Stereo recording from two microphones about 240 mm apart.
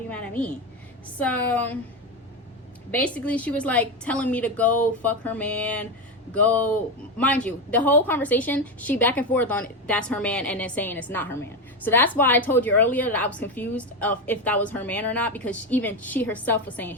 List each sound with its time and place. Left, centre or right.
0.1 s a woman's voice: centre
2.9 s a woman's voice: centre